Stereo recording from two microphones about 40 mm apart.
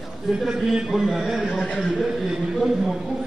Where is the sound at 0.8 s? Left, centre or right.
Centre.